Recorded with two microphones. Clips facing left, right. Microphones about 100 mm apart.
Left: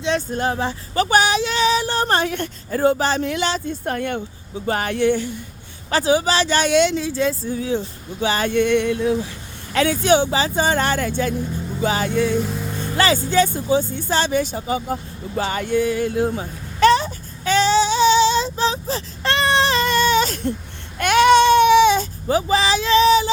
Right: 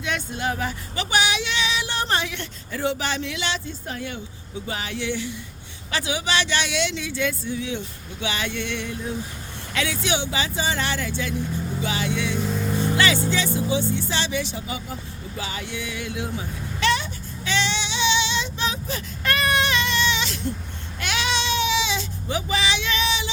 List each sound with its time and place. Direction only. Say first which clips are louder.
0.3 s speech: left 5 dB; 40° left (ahead or behind)
0.9 s speech: left 7 dB; 40° left (ahead or behind)
3.8 s speech: left 8 dB; 55° left (ahead or behind); by 9.1 s 70° left (ahead or behind)
9.7 s speech: left 9 dB; 45° left (ahead or behind)
12.5 s speech: right 1 dB; centre (ahead or behind)
13.0 s speech: left 9 dB; 40° left (ahead or behind)
15.4 s a sound: left 12 dB; 50° left (ahead or behind)